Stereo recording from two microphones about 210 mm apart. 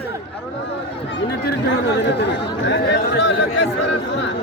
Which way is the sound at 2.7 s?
55° left (ahead or behind).